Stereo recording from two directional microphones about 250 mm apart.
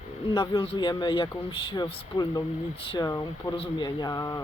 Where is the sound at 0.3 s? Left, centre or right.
Centre.